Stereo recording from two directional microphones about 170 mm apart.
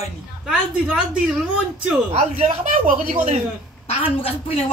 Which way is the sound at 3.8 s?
35° left (ahead or behind).